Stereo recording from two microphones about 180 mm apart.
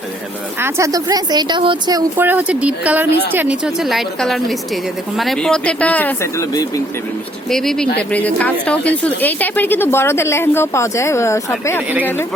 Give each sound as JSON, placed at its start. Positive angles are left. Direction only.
{"t": 0.6, "sound": "a woman's voice", "side_deg": -20}
{"t": 2.1, "sound": "a woman's voice", "side_deg": -10}
{"t": 7.5, "sound": "a woman's voice", "side_deg": 0}